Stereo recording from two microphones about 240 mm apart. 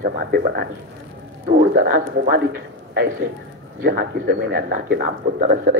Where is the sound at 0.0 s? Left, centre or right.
Right.